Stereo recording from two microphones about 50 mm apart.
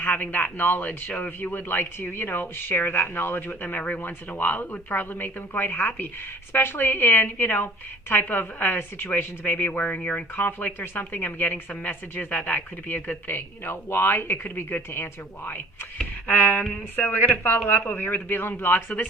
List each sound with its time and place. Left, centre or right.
0.0 s a woman's voice: left
16.2 s a woman's voice: left